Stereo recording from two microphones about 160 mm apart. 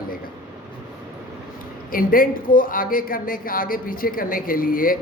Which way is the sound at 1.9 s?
60° left (ahead or behind).